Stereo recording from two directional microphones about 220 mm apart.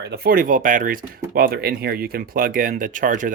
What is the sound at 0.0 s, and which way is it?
Speech, 45° right (ahead or behind).